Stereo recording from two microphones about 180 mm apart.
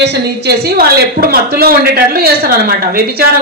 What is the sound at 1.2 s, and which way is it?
Speech, 55° right (ahead or behind).